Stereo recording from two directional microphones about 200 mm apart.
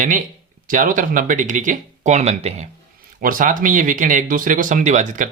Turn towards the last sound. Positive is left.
turn(degrees=-40)  # may be behind; listen again after turning